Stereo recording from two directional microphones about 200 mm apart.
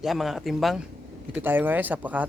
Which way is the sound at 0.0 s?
Centre (ahead or behind).